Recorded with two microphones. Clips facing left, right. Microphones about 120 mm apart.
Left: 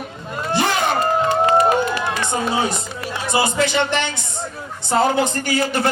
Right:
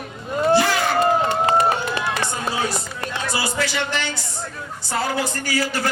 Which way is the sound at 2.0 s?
20° left (ahead or behind).